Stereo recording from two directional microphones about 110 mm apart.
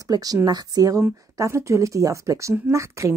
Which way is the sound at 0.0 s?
35° right (ahead or behind).